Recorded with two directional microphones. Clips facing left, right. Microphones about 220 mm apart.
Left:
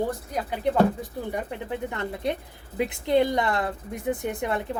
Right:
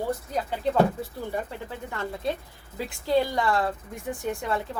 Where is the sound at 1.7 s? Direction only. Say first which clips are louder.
Left 3 dB; 20° left (ahead or behind).